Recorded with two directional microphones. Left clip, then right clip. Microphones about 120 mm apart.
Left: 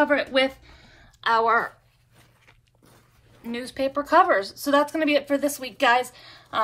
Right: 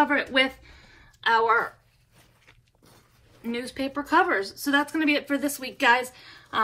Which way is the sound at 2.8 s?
5° right (ahead or behind).